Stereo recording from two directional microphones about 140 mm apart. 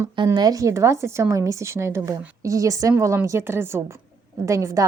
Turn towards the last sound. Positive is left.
turn(degrees=-20)  # may be behind; listen again after turning